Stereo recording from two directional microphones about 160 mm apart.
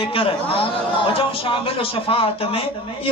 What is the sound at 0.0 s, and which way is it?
A man's voice, 35° left (ahead or behind).